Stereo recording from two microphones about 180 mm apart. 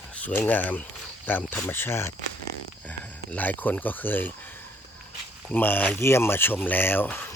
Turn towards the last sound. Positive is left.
turn(degrees=10)  # may be behind; listen again after turning